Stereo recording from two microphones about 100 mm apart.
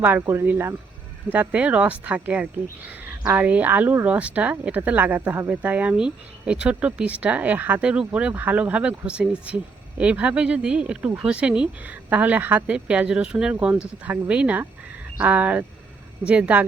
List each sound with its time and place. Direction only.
0.2 s speech: 30° right (ahead or behind)
0.4 s speech: 20° right (ahead or behind)